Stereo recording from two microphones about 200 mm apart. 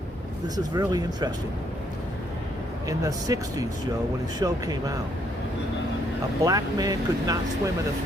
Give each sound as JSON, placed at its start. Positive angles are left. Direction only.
{"t": 0.4, "sound": "speech", "side_deg": -20}
{"t": 2.8, "sound": "speech", "side_deg": -15}
{"t": 6.4, "sound": "speech", "side_deg": -20}